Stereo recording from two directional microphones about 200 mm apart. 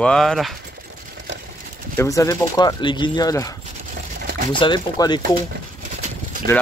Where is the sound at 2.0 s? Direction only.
15° left (ahead or behind).